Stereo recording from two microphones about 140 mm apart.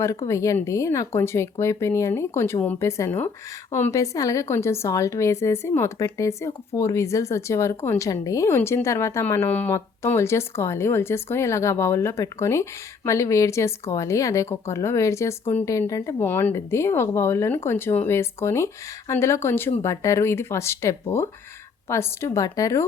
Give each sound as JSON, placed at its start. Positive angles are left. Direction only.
{"t": 0.0, "sound": "speech", "side_deg": 20}